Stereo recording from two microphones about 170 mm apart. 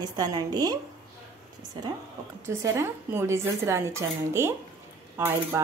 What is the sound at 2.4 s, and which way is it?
Speech, 15° right (ahead or behind).